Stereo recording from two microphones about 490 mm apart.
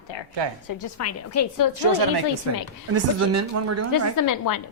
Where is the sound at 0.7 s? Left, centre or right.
Left.